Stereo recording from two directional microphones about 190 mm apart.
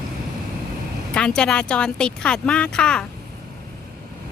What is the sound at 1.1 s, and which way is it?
Speech, 5° left (ahead or behind).